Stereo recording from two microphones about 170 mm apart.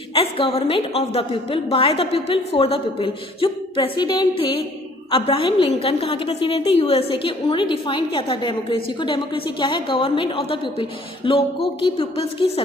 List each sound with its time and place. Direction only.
0.1 s a woman's voice: 30° left (ahead or behind)